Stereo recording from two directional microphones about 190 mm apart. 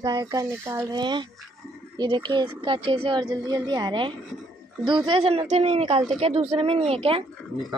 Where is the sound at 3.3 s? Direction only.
20° right (ahead or behind).